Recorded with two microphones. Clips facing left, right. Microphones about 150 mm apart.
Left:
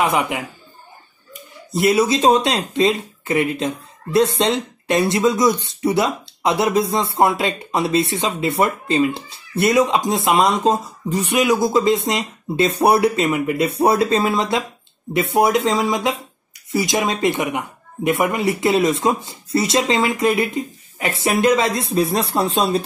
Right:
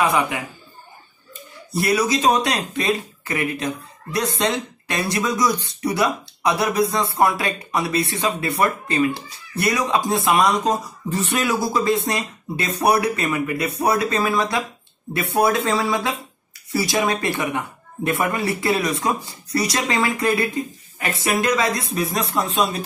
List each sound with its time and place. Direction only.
0.0 s speech: 20° left (ahead or behind)
1.7 s speech: 20° left (ahead or behind)
11.1 s speech: 15° left (ahead or behind); by 22.8 s 30° left (ahead or behind)